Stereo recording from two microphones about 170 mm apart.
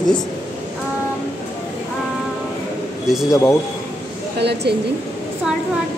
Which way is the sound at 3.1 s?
Centre (ahead or behind).